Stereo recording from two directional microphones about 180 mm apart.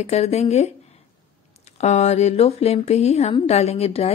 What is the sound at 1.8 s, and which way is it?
Speech, 40° left (ahead or behind).